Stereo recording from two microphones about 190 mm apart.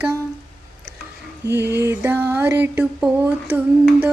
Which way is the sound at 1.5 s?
10° right (ahead or behind).